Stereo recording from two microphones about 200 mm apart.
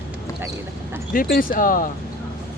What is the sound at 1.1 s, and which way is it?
Speech, 50° left (ahead or behind).